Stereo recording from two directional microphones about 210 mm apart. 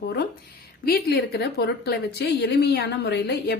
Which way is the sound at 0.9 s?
45° left (ahead or behind).